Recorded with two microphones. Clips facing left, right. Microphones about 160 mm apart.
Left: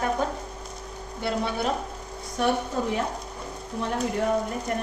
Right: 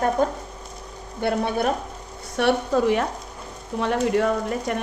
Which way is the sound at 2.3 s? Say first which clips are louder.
Right 5 dB; 75° right (ahead or behind).